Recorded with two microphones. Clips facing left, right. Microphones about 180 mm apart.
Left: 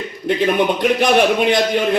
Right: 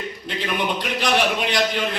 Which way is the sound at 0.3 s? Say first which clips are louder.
Left 7 dB; 50° left (ahead or behind).